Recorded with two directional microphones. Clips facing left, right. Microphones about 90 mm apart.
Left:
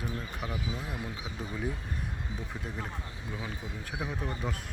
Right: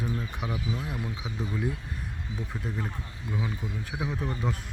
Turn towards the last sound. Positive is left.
turn(degrees=0)  # may be behind; listen again after turning